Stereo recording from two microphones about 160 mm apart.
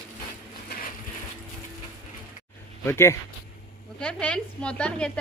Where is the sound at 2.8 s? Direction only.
15° left (ahead or behind).